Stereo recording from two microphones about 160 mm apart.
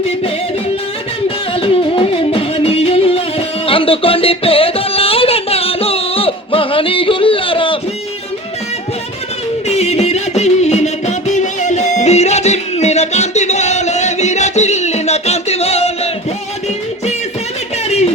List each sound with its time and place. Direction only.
1.5 s music: 35° left (ahead or behind)
9.6 s music: 40° left (ahead or behind)
17.8 s a sound: 40° left (ahead or behind)